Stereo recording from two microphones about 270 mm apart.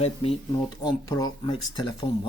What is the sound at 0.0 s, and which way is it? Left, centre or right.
Speech, left.